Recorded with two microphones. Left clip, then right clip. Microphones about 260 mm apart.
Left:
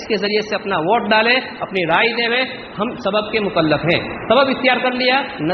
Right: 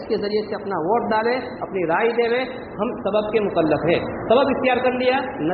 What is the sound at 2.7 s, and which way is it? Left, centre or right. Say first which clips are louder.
A man's voice: left 2 dB; left.